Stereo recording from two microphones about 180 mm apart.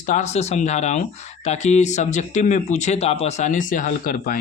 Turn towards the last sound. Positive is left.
turn(degrees=50)  # may be behind; listen again after turning